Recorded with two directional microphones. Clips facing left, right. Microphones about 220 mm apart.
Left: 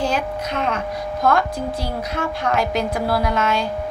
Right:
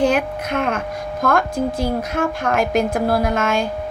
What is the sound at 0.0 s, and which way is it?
A woman's voice, 55° right (ahead or behind).